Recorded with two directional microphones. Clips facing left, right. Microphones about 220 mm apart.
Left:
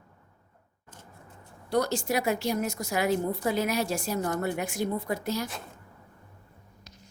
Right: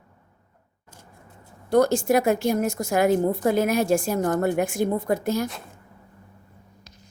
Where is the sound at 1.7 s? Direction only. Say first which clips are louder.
Right 8 dB; 50° right (ahead or behind).